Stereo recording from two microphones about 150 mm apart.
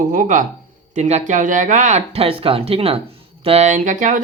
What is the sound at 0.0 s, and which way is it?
Speech, 65° right (ahead or behind).